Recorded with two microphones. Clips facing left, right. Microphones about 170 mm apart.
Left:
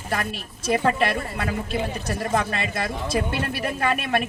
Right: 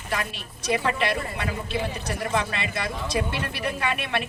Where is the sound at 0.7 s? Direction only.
45° left (ahead or behind).